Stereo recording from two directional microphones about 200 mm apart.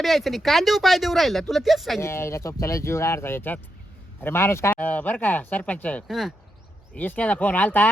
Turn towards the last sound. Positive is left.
turn(degrees=10)  # may be behind; listen again after turning